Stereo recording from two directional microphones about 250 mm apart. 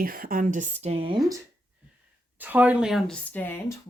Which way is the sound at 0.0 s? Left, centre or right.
Right.